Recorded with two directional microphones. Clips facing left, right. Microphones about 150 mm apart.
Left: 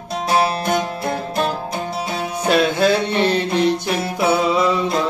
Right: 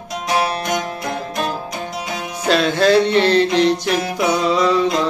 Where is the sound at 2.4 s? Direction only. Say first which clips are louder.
Right 1 dB; 10° left (ahead or behind).